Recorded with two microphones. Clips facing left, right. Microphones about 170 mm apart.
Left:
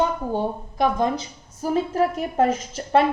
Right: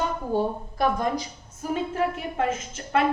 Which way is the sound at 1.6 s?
35° left (ahead or behind).